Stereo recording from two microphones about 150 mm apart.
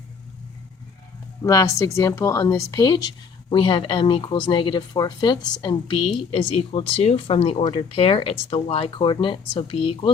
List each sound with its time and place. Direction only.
1.5 s speech: 20° left (ahead or behind); by 10.1 s 40° left (ahead or behind)